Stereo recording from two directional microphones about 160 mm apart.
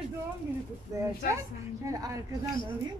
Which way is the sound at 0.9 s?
20° right (ahead or behind).